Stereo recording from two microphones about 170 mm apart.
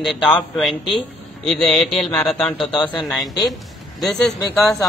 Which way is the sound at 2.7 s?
25° left (ahead or behind).